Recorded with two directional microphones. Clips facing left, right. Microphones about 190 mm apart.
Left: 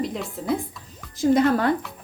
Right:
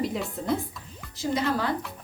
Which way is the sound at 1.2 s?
55° left (ahead or behind).